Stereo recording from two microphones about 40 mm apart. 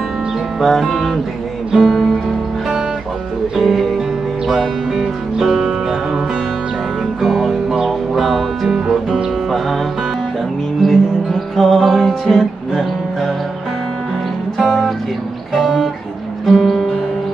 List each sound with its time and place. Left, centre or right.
0.7 s music: centre
3.6 s music: centre
10.8 s music: centre
15.5 s music: centre